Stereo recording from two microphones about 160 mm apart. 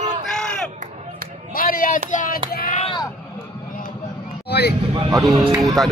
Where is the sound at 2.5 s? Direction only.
65° left (ahead or behind).